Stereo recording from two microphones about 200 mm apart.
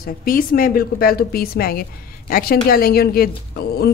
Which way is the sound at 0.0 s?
45° left (ahead or behind).